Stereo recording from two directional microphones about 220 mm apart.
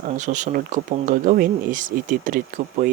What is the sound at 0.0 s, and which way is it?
Speech, 35° right (ahead or behind).